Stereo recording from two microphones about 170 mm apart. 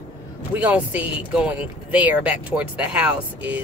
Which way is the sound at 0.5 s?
10° right (ahead or behind).